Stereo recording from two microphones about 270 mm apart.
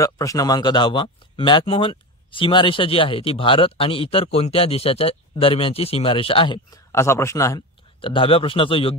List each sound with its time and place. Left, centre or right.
0.0 s speech: centre